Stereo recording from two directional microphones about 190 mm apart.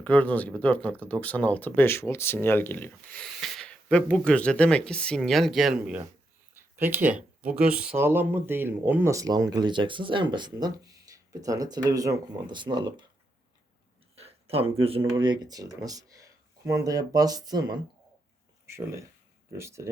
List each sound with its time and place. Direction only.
0.0 s speech: 5° left (ahead or behind)
6.5 s a sound: 10° right (ahead or behind)
7.7 s speech: 5° right (ahead or behind); by 13.1 s 25° right (ahead or behind)
14.2 s speech: 30° right (ahead or behind); by 19.9 s 15° right (ahead or behind)